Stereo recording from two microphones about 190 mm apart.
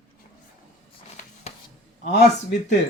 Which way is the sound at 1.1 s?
35° left (ahead or behind).